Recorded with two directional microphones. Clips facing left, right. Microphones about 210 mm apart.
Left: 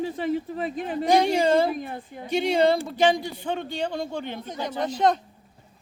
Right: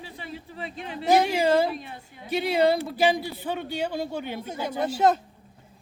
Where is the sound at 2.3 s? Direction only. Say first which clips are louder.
Left 1 dB; 5° right (ahead or behind).